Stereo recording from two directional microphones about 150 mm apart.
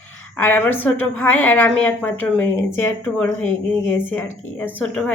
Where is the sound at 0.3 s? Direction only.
15° left (ahead or behind).